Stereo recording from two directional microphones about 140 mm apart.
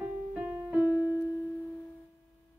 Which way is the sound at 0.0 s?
10° right (ahead or behind).